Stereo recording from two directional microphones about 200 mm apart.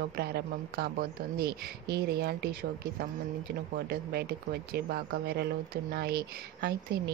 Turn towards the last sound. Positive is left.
turn(degrees=-55)  # may be behind; listen again after turning